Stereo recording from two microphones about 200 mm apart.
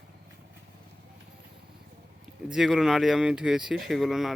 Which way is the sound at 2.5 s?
Centre (ahead or behind).